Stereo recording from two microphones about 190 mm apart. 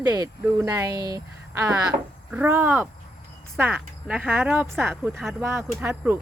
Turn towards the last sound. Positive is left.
turn(degrees=-10)  # may be behind; listen again after turning